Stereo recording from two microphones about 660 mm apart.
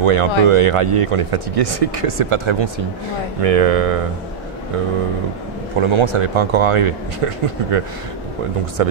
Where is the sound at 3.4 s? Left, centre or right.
Right.